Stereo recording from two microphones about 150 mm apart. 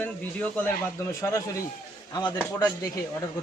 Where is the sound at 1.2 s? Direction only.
20° left (ahead or behind).